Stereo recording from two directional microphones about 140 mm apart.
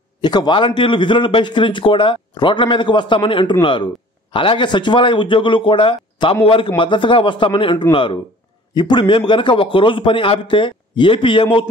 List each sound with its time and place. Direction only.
0.2 s a man's voice: 30° left (ahead or behind)